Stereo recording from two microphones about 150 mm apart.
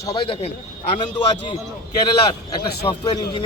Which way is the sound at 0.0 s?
30° left (ahead or behind).